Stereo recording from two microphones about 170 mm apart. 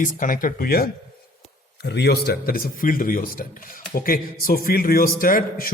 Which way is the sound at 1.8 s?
75° left (ahead or behind).